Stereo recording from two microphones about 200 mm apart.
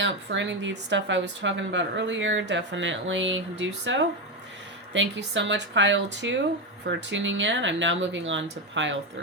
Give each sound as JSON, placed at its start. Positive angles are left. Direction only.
{"t": 0.0, "sound": "speech", "side_deg": -65}